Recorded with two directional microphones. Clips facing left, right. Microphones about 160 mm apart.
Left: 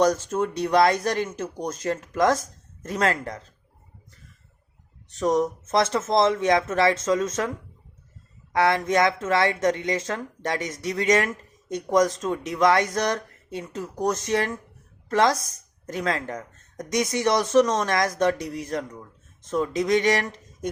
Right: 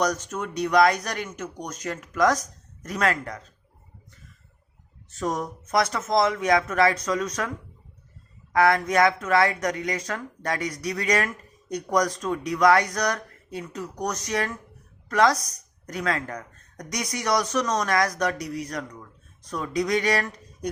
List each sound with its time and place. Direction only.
0.0 s speech: 30° left (ahead or behind)
5.0 s speech: 20° left (ahead or behind)
8.5 s speech: 25° left (ahead or behind)